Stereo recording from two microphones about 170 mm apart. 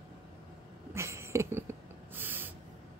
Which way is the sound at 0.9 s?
15° right (ahead or behind).